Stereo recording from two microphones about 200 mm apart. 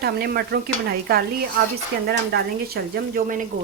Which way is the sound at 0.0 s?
50° right (ahead or behind).